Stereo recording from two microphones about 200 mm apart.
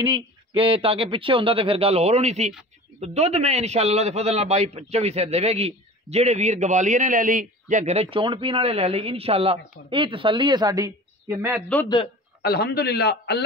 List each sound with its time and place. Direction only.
0.0 s a man's voice: 25° right (ahead or behind)
12.4 s a man's voice: 55° left (ahead or behind)